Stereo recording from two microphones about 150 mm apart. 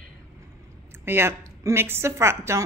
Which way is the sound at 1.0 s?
15° right (ahead or behind).